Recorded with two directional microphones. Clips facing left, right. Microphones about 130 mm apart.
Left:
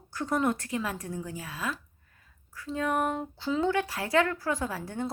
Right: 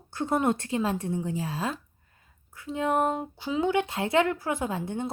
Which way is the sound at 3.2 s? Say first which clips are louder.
Right 1 dB; 15° right (ahead or behind).